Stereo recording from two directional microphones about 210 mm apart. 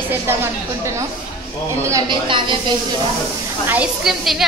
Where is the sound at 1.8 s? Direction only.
20° right (ahead or behind).